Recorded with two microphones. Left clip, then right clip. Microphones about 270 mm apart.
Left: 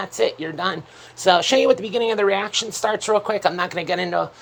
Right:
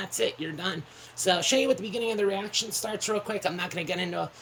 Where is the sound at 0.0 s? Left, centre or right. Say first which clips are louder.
Left 8 dB; centre.